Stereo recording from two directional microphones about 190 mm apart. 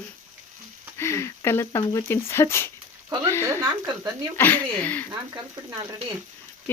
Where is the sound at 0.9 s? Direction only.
15° left (ahead or behind).